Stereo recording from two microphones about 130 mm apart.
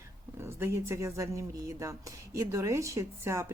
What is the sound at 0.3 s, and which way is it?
Speech, 20° right (ahead or behind).